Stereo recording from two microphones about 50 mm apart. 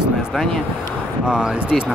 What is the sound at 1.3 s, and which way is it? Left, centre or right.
Speech, centre.